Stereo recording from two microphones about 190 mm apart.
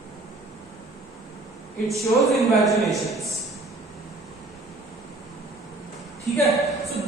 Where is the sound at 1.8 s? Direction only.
Centre (ahead or behind).